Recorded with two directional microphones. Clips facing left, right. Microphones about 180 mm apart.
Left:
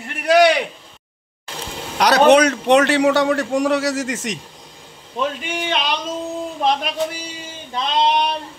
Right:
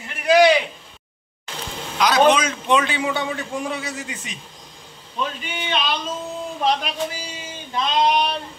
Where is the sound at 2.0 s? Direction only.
70° left (ahead or behind).